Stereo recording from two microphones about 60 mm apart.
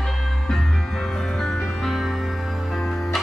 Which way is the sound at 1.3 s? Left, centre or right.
Centre.